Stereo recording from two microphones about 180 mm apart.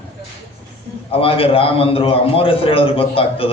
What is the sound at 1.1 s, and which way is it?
A man's voice, 30° left (ahead or behind).